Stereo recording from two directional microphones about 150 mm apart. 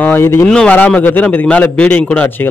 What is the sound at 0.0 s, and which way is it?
A man's voice, 15° left (ahead or behind).